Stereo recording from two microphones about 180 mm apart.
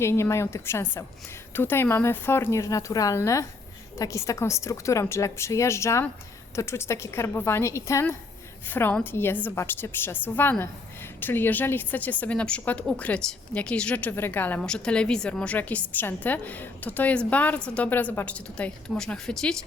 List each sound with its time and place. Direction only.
0.0 s a woman's voice: 15° left (ahead or behind)